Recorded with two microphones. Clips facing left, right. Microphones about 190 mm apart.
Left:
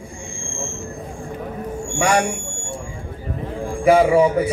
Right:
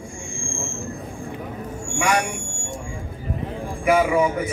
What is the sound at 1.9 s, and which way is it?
Speech, 35° left (ahead or behind).